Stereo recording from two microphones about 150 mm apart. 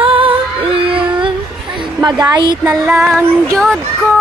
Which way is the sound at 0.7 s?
35° right (ahead or behind).